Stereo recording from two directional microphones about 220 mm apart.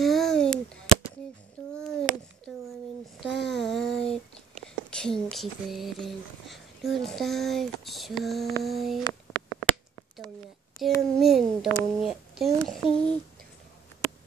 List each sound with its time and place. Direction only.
0.0 s babbling: centre (ahead or behind)
1.6 s a sound: 5° left (ahead or behind)
3.2 s child singing: centre (ahead or behind)
4.9 s speech: 5° left (ahead or behind)
9.3 s a sound: 5° left (ahead or behind)
10.8 s speech: centre (ahead or behind)